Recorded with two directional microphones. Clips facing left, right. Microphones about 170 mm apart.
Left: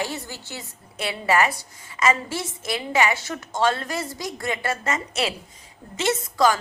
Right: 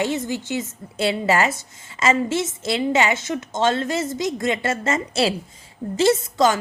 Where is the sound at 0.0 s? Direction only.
20° right (ahead or behind).